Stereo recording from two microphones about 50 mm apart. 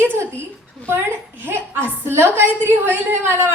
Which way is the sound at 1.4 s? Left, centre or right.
Right.